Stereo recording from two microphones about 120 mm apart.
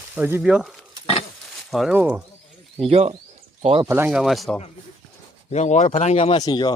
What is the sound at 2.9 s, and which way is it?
Speech, 55° right (ahead or behind).